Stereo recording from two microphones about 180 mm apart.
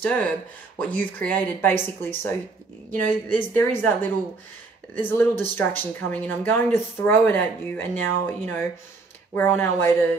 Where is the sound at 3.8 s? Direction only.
10° left (ahead or behind).